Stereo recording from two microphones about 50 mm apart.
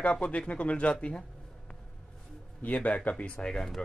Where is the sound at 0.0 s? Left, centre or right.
Left.